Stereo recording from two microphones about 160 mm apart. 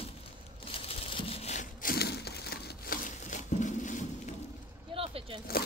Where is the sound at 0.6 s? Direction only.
35° left (ahead or behind).